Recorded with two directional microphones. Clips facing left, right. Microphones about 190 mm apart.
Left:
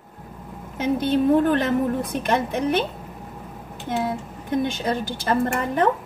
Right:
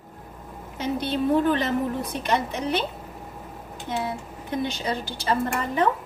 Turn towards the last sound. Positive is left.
turn(degrees=50)  # may be behind; listen again after turning